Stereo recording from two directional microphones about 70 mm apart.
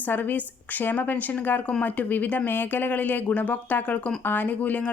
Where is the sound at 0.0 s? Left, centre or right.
Left.